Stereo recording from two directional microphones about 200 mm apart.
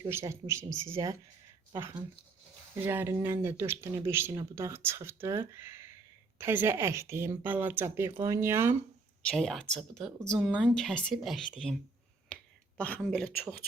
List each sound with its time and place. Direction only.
0.0 s speech: 15° right (ahead or behind)
9.2 s a woman's voice: centre (ahead or behind)